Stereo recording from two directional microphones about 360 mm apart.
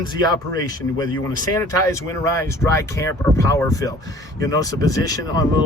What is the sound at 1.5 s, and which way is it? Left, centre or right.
Speech, centre.